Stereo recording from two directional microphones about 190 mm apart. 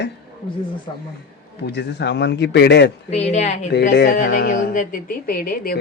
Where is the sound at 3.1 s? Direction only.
35° left (ahead or behind).